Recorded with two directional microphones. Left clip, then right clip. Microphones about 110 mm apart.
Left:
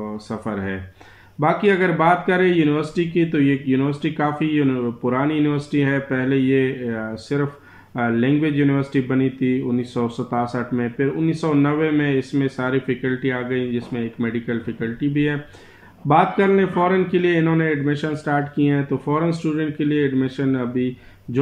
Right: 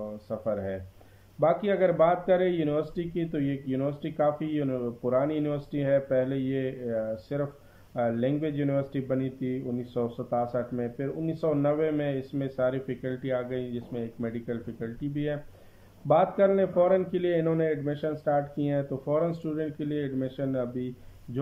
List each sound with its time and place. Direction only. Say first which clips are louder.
1.4 s speech: left 6 dB; 30° right (ahead or behind)